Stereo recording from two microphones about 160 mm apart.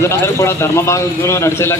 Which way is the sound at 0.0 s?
15° left (ahead or behind).